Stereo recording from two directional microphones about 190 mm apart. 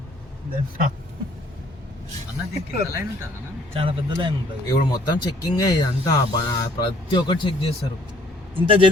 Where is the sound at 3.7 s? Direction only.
30° right (ahead or behind).